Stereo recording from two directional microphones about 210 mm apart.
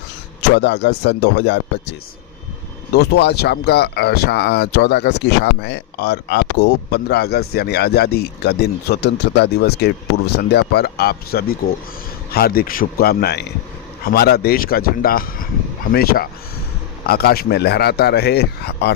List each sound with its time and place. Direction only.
0.5 s speech: 55° left (ahead or behind)